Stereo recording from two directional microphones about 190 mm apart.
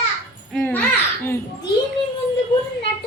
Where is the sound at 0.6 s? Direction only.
10° left (ahead or behind).